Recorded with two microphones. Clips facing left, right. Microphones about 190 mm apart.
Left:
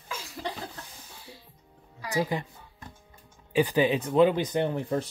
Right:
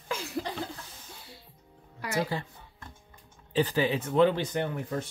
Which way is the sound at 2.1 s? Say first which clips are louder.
Left 2 dB; 15° left (ahead or behind).